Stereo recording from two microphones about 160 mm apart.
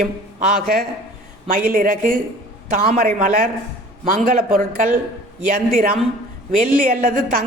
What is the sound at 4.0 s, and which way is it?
A man's voice, 60° right (ahead or behind).